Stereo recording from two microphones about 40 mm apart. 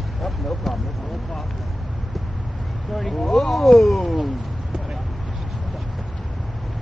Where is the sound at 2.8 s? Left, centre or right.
Centre.